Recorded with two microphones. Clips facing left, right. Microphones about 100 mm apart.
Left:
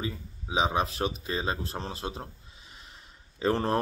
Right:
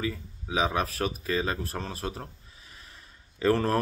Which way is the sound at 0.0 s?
25° left (ahead or behind).